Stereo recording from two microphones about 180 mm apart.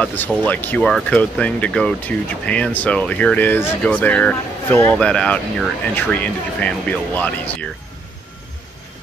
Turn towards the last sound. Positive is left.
turn(degrees=10)  # may be behind; listen again after turning